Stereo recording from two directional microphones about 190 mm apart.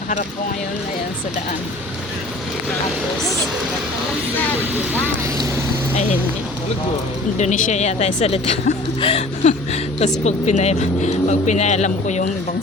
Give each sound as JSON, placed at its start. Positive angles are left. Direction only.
{"t": 5.0, "sound": "speech", "side_deg": -15}
{"t": 7.3, "sound": "speech", "side_deg": 35}